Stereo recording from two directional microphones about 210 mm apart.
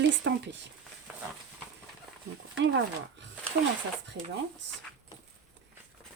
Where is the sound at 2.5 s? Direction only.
60° right (ahead or behind).